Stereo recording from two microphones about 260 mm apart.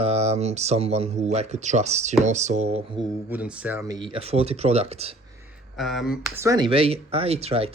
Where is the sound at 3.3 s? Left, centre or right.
Centre; by 5.1 s right.